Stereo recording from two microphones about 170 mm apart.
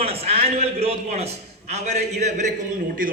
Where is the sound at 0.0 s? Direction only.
35° right (ahead or behind).